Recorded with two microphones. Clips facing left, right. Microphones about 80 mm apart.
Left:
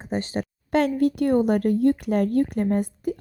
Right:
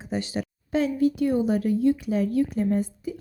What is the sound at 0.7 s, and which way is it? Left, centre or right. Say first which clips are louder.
A woman's voice: left 2 dB; left.